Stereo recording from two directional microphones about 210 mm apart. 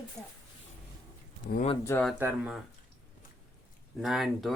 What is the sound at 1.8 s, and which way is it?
Speech, 5° left (ahead or behind).